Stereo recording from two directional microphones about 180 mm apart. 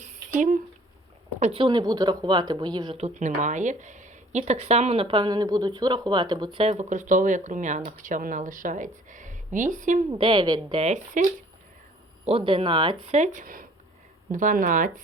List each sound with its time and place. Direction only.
0.0 s a sound: 45° right (ahead or behind)
1.4 s speech: 35° right (ahead or behind)
3.0 s speech: 40° right (ahead or behind)
10.1 s speech: 25° right (ahead or behind); by 11.4 s 45° right (ahead or behind)
12.2 s speech: 30° right (ahead or behind)
13.1 s speech: 45° right (ahead or behind)